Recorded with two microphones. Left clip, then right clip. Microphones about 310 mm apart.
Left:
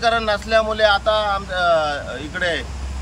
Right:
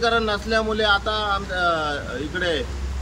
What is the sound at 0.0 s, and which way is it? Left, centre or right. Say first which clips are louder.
Speech: left 2 dB; centre.